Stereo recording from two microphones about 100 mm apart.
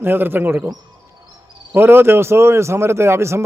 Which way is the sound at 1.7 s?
20° right (ahead or behind).